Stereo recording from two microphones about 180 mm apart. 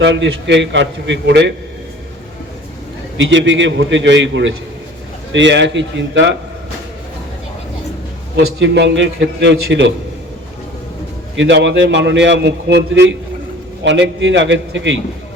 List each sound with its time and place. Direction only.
0.0 s a man's voice: 80° right
3.2 s a man's voice: 90° right
8.4 s a man's voice: 80° right
11.3 s a man's voice: 85° right